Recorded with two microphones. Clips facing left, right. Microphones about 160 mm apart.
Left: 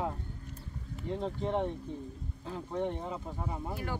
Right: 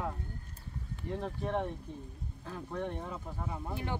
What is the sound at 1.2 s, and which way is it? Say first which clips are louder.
Speech: left 3 dB; 20° left (ahead or behind).